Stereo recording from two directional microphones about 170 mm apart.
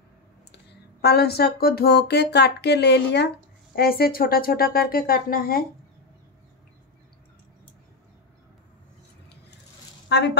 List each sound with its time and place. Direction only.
1.0 s speech: 70° left (ahead or behind)
3.7 s speech: 65° left (ahead or behind)
10.0 s a sound: 80° left